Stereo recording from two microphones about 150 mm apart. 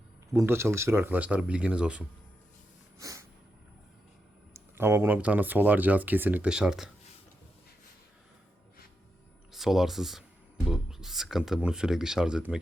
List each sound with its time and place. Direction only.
0.3 s speech: 15° right (ahead or behind)
3.0 s a sound: 20° right (ahead or behind)
4.5 s speech: 15° right (ahead or behind)
9.5 s speech: centre (ahead or behind)